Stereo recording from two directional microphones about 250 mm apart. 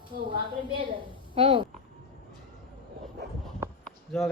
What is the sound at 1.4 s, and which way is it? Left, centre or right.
Speech, right.